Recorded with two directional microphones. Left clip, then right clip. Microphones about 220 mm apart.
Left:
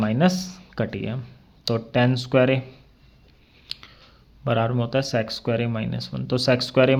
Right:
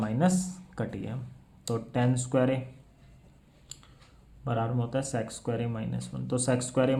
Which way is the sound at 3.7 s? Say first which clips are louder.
Left 14 dB; 35° left (ahead or behind).